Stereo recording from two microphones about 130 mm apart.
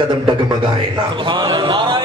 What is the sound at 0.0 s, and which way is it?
Speech, 35° right (ahead or behind).